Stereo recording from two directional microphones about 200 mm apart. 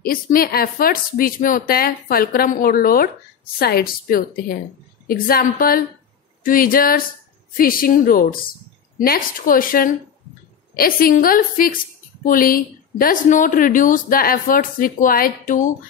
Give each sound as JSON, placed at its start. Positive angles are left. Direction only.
{"t": 0.0, "sound": "a woman's voice", "side_deg": 45}